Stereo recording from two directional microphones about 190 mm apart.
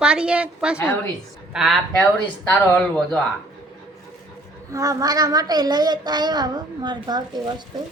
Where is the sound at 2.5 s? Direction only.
5° left (ahead or behind).